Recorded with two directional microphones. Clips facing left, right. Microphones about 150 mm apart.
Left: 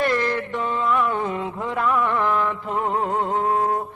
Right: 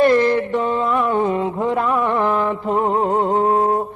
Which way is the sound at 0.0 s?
30° right (ahead or behind).